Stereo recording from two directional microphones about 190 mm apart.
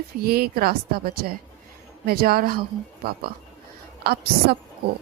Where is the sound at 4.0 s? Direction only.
55° right (ahead or behind).